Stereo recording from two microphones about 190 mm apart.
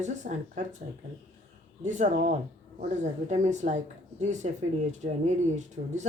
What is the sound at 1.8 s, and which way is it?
Speech, 40° right (ahead or behind).